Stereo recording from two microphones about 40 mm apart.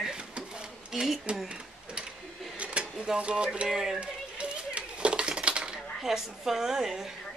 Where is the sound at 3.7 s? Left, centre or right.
Centre.